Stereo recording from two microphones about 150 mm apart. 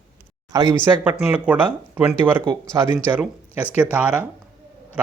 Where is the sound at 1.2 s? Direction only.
10° right (ahead or behind).